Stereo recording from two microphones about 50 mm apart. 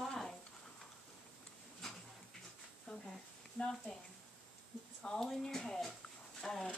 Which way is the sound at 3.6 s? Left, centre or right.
Left.